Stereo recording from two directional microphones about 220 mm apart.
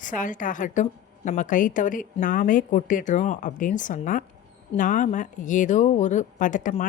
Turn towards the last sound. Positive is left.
turn(degrees=35)  # may be behind; listen again after turning